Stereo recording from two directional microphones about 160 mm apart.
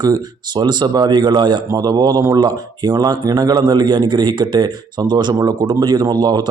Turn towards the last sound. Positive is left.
turn(degrees=-25)  # may be behind; listen again after turning